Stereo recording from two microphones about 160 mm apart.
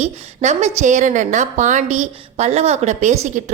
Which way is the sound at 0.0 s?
45° right (ahead or behind).